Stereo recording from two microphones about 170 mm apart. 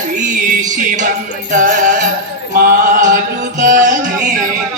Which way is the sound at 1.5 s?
50° right (ahead or behind).